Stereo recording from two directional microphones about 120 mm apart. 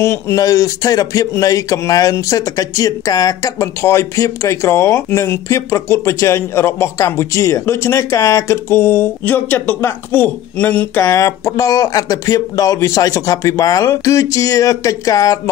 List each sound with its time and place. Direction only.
0.0 s speech: 25° left (ahead or behind)
11.0 s speech: 25° left (ahead or behind)